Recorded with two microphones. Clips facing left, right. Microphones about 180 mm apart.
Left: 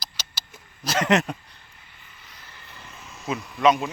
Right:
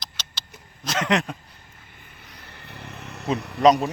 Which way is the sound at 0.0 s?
10° left (ahead or behind).